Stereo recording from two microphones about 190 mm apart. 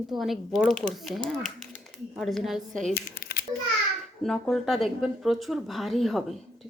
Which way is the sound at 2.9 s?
55° left (ahead or behind).